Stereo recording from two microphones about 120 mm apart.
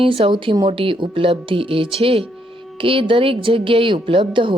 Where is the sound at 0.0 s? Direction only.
50° right (ahead or behind).